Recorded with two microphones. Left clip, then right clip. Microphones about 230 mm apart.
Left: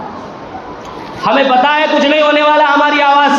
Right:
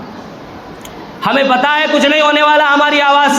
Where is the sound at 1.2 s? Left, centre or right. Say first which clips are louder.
Left 2 dB; right.